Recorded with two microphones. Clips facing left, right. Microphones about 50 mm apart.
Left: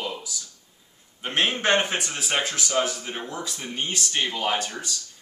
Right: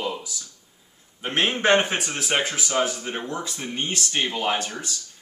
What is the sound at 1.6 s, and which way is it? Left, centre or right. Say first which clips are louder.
Speech: right 3 dB; centre.